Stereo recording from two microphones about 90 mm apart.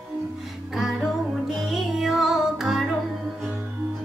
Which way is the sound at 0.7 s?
5° right (ahead or behind).